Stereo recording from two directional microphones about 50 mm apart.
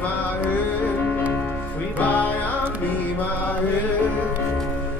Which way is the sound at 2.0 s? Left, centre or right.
Left.